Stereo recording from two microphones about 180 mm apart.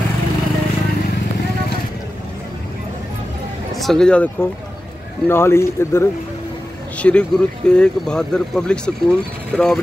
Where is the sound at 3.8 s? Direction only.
Centre (ahead or behind).